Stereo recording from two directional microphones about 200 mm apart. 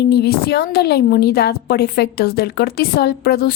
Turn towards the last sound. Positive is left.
turn(degrees=50)  # may be behind; listen again after turning